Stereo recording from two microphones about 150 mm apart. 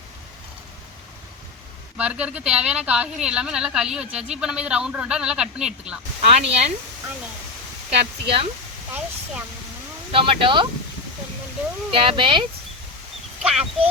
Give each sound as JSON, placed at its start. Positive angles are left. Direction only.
{"t": 2.0, "sound": "a woman's voice", "side_deg": -10}
{"t": 6.3, "sound": "speech", "side_deg": -45}
{"t": 7.9, "sound": "speech", "side_deg": -40}
{"t": 10.1, "sound": "speech", "side_deg": -35}
{"t": 11.9, "sound": "speech", "side_deg": -35}
{"t": 13.4, "sound": "speech", "side_deg": -5}